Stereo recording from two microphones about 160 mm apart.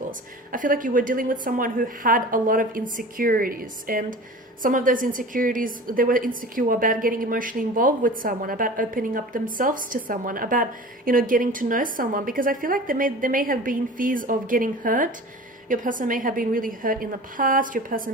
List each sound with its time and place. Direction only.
0.5 s a woman's voice: 55° right (ahead or behind)